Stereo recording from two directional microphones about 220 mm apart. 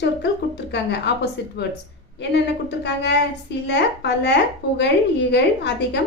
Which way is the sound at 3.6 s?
50° left (ahead or behind).